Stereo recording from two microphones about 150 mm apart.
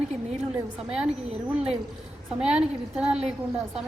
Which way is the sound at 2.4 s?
5° right (ahead or behind).